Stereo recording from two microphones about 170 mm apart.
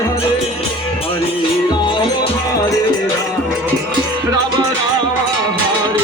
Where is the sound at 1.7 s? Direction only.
25° left (ahead or behind).